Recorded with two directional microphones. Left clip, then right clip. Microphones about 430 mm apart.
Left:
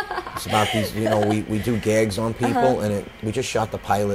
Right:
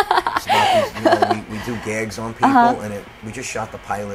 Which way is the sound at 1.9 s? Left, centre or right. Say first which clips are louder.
Left 6 dB; centre.